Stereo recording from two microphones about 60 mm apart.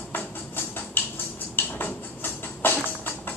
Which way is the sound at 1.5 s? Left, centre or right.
Left.